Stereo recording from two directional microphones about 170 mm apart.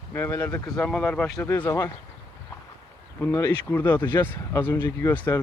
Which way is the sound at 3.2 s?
15° left (ahead or behind).